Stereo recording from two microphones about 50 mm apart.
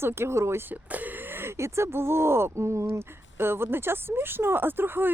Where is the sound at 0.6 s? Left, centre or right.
Right.